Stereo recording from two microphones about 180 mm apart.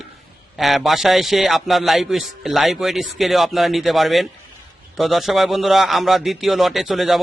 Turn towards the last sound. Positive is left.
turn(degrees=0)  # may be behind; listen again after turning